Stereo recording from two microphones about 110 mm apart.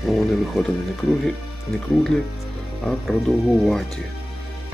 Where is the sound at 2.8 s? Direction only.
Centre (ahead or behind).